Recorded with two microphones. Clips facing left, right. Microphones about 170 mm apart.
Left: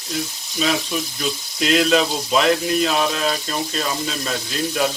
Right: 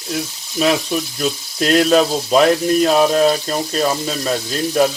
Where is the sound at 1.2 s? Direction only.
45° right (ahead or behind).